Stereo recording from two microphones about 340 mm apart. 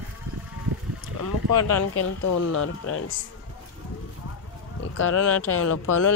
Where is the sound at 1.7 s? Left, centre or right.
Left.